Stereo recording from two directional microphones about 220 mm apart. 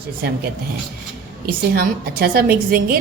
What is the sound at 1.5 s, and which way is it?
A woman's voice, 40° right (ahead or behind).